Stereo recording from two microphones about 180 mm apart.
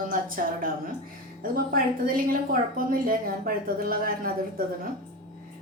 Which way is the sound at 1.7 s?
55° right (ahead or behind).